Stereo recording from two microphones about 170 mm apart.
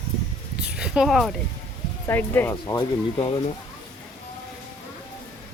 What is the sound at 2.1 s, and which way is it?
Speech, 10° left (ahead or behind).